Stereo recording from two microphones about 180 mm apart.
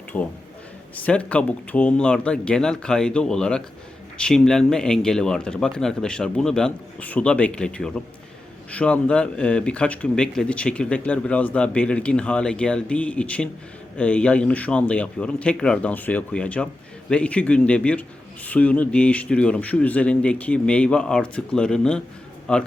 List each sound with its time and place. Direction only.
0.1 s speech: 15° left (ahead or behind)